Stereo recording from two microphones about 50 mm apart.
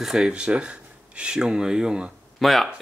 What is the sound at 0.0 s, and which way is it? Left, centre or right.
Speech, centre.